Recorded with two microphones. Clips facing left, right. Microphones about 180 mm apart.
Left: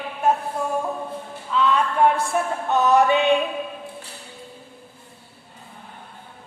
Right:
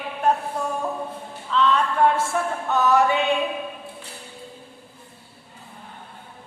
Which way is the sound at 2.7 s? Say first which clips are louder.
Left 2 dB; 20° left (ahead or behind).